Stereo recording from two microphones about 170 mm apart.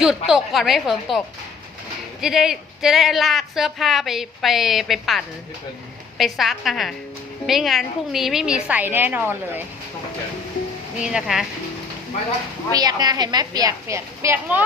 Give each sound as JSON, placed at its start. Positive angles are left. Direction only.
{"t": 0.0, "sound": "speech", "side_deg": 0}
{"t": 2.2, "sound": "speech", "side_deg": 0}
{"t": 11.0, "sound": "speech", "side_deg": -5}
{"t": 12.7, "sound": "a woman's voice", "side_deg": -25}